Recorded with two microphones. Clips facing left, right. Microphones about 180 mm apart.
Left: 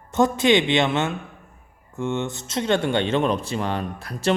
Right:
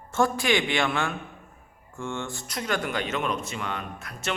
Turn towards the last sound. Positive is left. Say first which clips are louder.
# left 8 dB
turn(degrees=35)  # may be behind; listen again after turning